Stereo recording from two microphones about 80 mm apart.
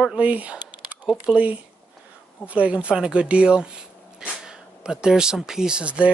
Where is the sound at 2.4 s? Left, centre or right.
Centre.